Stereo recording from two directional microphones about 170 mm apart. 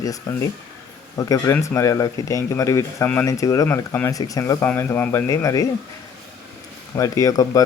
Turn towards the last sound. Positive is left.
turn(degrees=20)  # may be behind; listen again after turning